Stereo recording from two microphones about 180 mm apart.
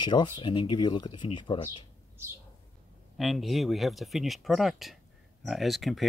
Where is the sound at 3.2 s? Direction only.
Centre (ahead or behind).